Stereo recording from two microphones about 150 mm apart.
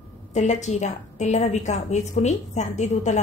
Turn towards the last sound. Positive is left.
turn(degrees=50)  # may be behind; listen again after turning